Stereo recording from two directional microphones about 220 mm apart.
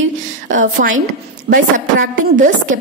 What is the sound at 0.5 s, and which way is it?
Speech, 35° right (ahead or behind).